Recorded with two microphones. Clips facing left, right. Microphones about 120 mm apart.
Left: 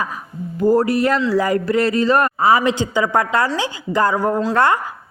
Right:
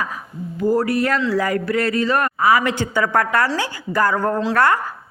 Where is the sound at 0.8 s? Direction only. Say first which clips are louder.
Left 2 dB; 20° left (ahead or behind).